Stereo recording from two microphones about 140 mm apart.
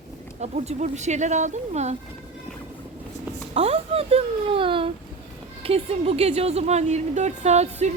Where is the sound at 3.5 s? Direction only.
50° right (ahead or behind).